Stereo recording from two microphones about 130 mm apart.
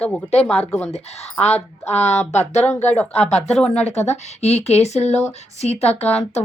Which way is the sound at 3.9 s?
55° left (ahead or behind).